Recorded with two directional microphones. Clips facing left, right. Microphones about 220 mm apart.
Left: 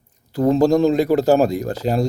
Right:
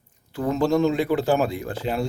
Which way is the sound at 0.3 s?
35° left (ahead or behind).